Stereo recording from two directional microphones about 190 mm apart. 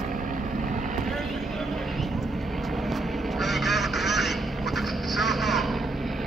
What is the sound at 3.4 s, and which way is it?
Quack, centre (ahead or behind).